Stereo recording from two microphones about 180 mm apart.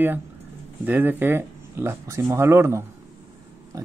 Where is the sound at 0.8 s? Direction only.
10° right (ahead or behind).